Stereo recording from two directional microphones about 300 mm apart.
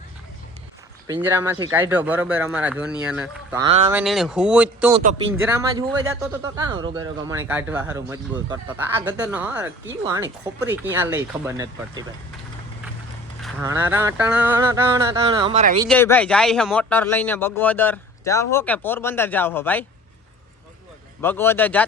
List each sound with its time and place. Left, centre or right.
1.0 s speech: centre
4.9 s speech: centre
13.4 s speech: centre
15.9 s speech: centre
21.2 s speech: centre